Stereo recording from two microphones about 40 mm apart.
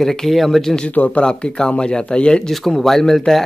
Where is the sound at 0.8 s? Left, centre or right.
Left.